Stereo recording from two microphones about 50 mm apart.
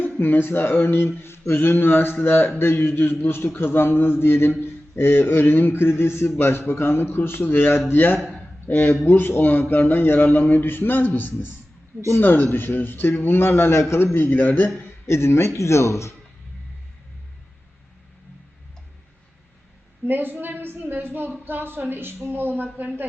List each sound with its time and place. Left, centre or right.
0.0 s a man's voice: left
15.0 s speech: left
20.1 s a woman's voice: right